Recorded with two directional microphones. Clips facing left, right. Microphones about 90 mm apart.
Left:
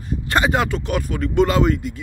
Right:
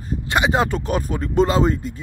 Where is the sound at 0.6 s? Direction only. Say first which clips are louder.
Right 1 dB; 35° right (ahead or behind).